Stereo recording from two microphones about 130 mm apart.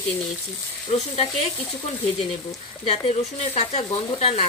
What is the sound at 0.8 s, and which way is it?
Speech, 50° left (ahead or behind).